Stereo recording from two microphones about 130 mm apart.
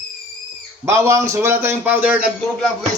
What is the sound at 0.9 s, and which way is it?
A man's voice, 20° right (ahead or behind).